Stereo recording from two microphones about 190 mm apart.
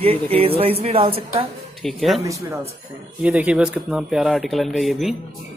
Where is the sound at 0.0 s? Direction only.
30° right (ahead or behind).